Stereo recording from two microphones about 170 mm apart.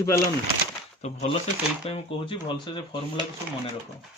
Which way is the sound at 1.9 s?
30° left (ahead or behind).